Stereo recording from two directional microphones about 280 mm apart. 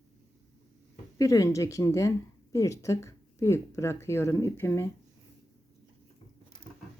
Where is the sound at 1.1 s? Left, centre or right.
Centre.